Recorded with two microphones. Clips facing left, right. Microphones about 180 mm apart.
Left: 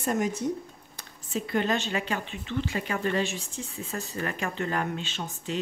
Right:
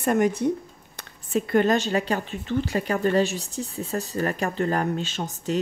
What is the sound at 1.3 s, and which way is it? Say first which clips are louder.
A woman's voice: right 7 dB; 50° right (ahead or behind).